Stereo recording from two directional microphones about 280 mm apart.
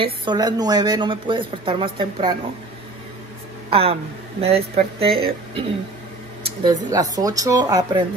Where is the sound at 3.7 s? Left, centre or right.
Right.